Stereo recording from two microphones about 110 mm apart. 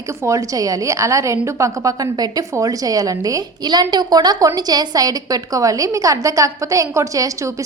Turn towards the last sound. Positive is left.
turn(degrees=-30)  # may be behind; listen again after turning